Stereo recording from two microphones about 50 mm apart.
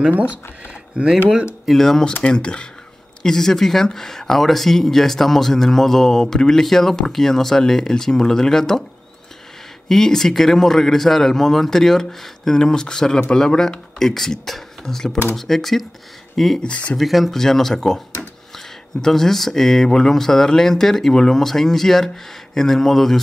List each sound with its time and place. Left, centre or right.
1.0 s speech: right
1.7 s speech: centre
2.3 s speech: centre
9.8 s speech: centre
16.5 s speech: left
16.9 s speech: centre